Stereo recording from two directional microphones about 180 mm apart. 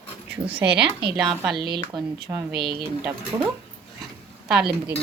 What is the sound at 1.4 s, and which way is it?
Speech, centre (ahead or behind).